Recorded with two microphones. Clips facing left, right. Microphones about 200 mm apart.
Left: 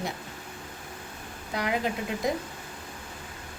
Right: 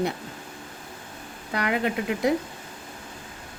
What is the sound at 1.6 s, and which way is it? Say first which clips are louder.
Speech: right 3 dB; 65° right (ahead or behind).